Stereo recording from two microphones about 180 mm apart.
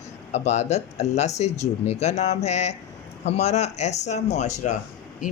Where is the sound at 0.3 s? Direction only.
40° left (ahead or behind).